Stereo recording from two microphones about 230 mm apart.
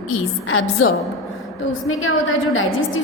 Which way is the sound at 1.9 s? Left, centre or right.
Left.